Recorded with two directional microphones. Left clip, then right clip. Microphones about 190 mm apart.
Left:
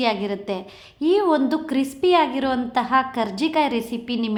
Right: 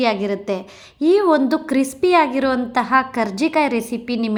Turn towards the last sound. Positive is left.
turn(degrees=-20)  # may be behind; listen again after turning